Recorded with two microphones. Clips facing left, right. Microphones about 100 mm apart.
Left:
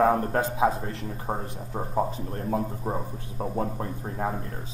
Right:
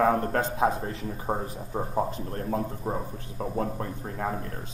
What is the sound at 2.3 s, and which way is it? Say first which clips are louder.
Speech: left 1 dB; 25° left (ahead or behind).